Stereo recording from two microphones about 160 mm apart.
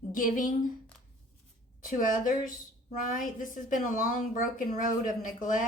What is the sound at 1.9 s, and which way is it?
Speech, 55° left (ahead or behind).